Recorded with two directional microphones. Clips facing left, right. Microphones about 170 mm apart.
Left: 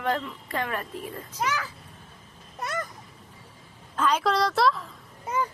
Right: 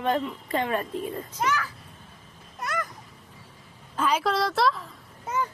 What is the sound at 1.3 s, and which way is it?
Speech, 10° left (ahead or behind).